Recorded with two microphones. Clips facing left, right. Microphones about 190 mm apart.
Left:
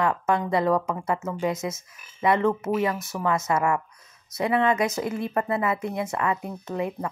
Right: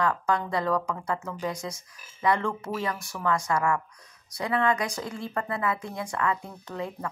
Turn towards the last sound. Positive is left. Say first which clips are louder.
# left 5 dB
turn(degrees=20)  # may be behind; listen again after turning